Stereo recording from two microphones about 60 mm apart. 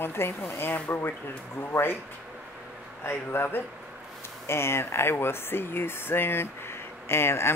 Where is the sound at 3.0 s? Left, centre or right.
Left.